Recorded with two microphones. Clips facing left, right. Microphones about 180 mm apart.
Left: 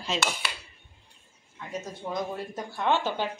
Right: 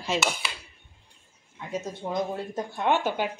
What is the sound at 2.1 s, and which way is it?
A man's voice, 20° right (ahead or behind).